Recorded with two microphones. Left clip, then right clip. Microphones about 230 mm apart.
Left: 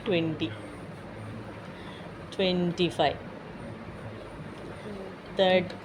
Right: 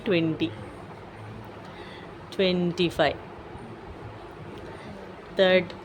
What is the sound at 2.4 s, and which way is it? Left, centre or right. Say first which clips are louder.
Speech: right 3 dB; right.